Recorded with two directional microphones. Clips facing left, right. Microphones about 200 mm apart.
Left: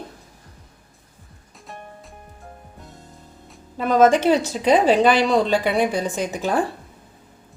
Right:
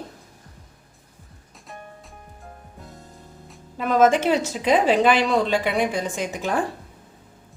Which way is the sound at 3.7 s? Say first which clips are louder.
Left 2 dB; 35° left (ahead or behind).